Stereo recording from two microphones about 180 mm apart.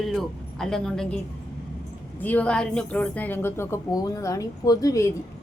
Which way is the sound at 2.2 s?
10° left (ahead or behind).